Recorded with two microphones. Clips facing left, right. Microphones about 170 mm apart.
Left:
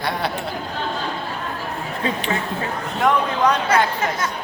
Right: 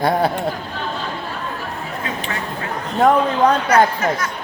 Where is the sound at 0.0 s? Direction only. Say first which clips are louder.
Right 7 dB; 45° right (ahead or behind).